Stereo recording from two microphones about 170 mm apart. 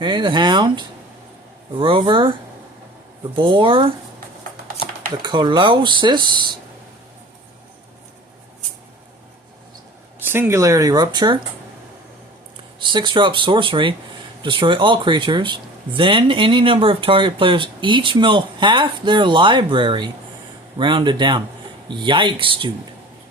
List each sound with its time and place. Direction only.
0.0 s speech: 25° right (ahead or behind)
3.3 s speech: 30° right (ahead or behind)
5.2 s speech: 25° right (ahead or behind)
10.2 s speech: 15° right (ahead or behind)
12.8 s speech: 25° right (ahead or behind)